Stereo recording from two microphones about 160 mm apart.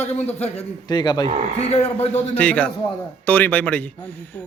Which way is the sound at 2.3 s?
10° left (ahead or behind).